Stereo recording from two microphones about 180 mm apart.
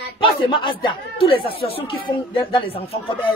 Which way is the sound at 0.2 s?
30° left (ahead or behind).